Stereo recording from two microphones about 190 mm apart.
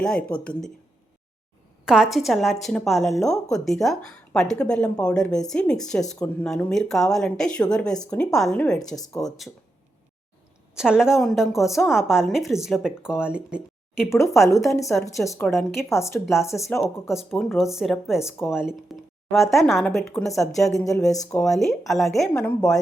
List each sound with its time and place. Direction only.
0.0 s a woman's voice: 5° left (ahead or behind)
1.8 s a woman's voice: 5° right (ahead or behind)
10.8 s a woman's voice: 5° right (ahead or behind)
14.1 s a woman's voice: 15° left (ahead or behind)
16.8 s a woman's voice: centre (ahead or behind)